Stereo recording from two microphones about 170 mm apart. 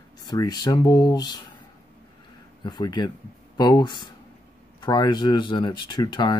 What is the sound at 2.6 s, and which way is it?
Speech, 25° left (ahead or behind).